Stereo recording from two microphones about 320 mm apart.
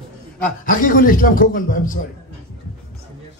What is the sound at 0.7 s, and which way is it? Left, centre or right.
Speech, left.